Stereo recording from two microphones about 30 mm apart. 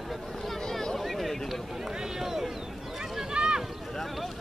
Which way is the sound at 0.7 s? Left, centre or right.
Centre.